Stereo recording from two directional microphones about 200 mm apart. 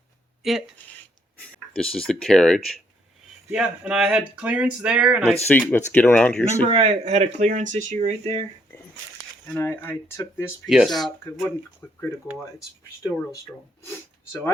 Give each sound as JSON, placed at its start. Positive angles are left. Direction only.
{"t": 1.4, "sound": "speech", "side_deg": 5}
{"t": 5.5, "sound": "speech", "side_deg": 10}
{"t": 6.7, "sound": "speech", "side_deg": -30}
{"t": 9.5, "sound": "speech", "side_deg": 10}
{"t": 10.7, "sound": "speech", "side_deg": 0}
{"t": 11.8, "sound": "speech", "side_deg": 15}